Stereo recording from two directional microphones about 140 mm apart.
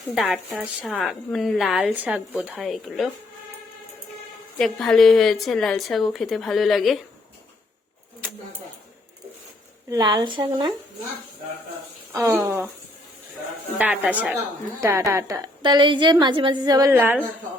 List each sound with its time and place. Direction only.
0.1 s a woman's voice: centre (ahead or behind)
4.5 s a woman's voice: 5° left (ahead or behind)
9.9 s speech: 30° right (ahead or behind)
12.1 s a woman's voice: 20° right (ahead or behind)
13.7 s a woman's voice: 10° right (ahead or behind); by 16.9 s 30° right (ahead or behind)
16.9 s a woman's voice: 15° right (ahead or behind)